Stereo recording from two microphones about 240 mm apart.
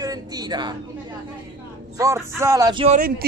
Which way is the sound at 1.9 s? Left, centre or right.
Centre.